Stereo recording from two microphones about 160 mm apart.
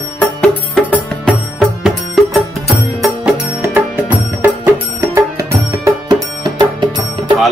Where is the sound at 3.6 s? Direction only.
10° right (ahead or behind).